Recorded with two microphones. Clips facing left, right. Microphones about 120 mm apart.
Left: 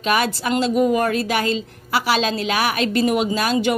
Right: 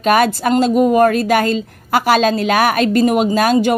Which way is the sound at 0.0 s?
45° right (ahead or behind).